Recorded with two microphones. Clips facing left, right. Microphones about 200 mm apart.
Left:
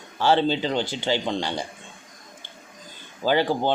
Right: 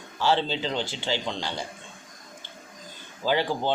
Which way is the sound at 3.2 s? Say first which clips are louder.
Left 4 dB; 55° left (ahead or behind).